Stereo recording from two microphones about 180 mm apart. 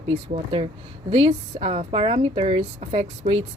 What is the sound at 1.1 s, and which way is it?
A woman's voice, 35° right (ahead or behind).